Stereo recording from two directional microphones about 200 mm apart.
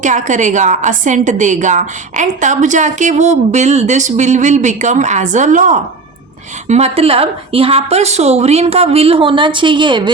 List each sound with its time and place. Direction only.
0.0 s a woman's voice: 40° right (ahead or behind); by 10.1 s 25° right (ahead or behind)